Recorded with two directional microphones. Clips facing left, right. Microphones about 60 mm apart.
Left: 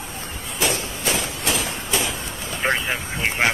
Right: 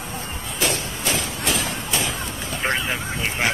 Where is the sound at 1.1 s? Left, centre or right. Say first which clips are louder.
Even; centre.